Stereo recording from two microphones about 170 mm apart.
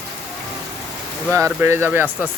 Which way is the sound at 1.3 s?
15° right (ahead or behind).